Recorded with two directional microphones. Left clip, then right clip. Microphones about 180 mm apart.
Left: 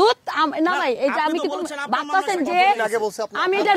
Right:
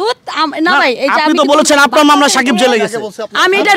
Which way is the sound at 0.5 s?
30° left (ahead or behind).